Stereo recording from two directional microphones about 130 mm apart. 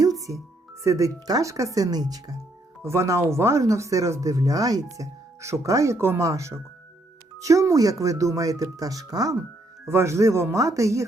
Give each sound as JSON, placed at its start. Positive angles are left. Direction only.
{"t": 0.0, "sound": "music", "side_deg": -25}
{"t": 0.3, "sound": "speech", "side_deg": -20}